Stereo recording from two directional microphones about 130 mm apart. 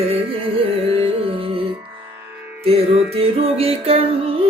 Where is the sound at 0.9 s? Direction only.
50° right (ahead or behind).